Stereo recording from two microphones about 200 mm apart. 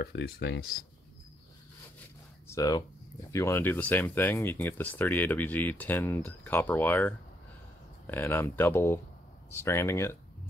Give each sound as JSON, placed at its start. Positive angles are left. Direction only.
{"t": 0.0, "sound": "speech", "side_deg": 55}
{"t": 2.4, "sound": "speech", "side_deg": 15}